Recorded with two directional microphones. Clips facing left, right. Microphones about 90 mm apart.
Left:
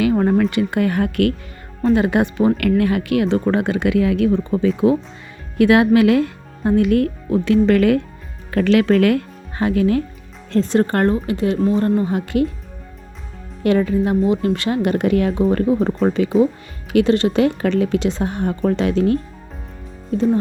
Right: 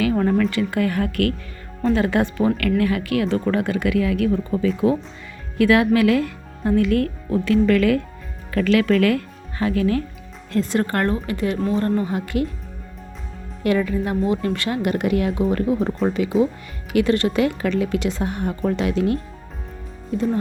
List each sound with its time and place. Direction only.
0.0 s speech: 20° left (ahead or behind)
2.6 s speech: 30° left (ahead or behind)
13.7 s speech: 40° left (ahead or behind)
14.0 s speech: 25° left (ahead or behind); by 16.3 s 40° left (ahead or behind)
16.9 s speech: 25° left (ahead or behind)